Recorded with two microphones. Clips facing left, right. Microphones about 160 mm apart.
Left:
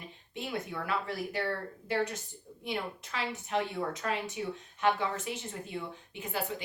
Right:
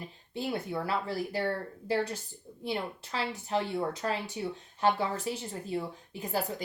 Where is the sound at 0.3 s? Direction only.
35° right (ahead or behind).